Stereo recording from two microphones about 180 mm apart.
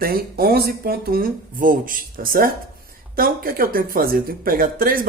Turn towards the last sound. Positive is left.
turn(degrees=-55)  # may be behind; listen again after turning